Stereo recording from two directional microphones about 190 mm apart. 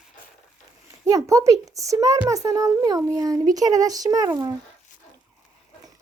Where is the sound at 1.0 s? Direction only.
15° right (ahead or behind).